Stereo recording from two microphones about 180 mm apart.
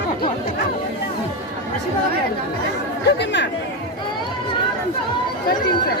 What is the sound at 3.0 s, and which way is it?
Chatter, 70° left (ahead or behind).